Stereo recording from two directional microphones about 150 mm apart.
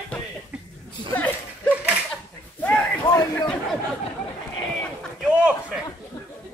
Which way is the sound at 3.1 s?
25° left (ahead or behind).